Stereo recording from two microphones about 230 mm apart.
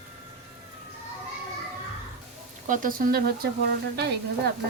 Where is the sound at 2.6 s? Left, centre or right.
Right.